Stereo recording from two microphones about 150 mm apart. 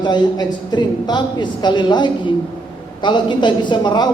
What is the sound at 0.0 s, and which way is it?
A woman's voice, 30° left (ahead or behind).